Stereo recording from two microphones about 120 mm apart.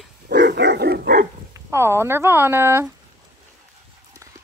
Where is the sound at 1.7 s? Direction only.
20° right (ahead or behind).